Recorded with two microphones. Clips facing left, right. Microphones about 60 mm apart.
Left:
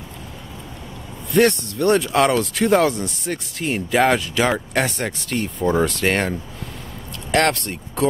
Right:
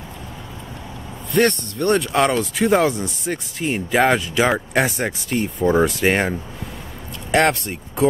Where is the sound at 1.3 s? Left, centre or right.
Centre.